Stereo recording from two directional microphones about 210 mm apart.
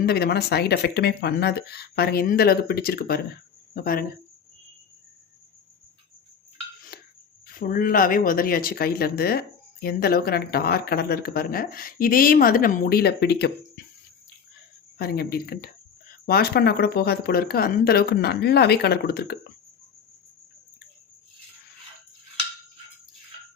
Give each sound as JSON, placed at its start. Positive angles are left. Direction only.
{"t": 0.0, "sound": "speech", "side_deg": 50}
{"t": 6.9, "sound": "cricket", "side_deg": 45}
{"t": 7.4, "sound": "speech", "side_deg": 45}
{"t": 14.9, "sound": "speech", "side_deg": 50}